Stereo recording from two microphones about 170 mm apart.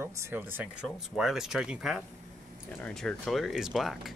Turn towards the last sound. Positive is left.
turn(degrees=0)  # may be behind; listen again after turning